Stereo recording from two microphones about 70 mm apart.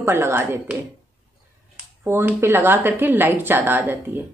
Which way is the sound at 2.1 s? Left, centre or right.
Right.